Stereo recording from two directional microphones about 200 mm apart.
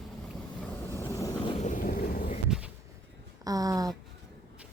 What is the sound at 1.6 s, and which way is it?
Vehicle, 40° left (ahead or behind).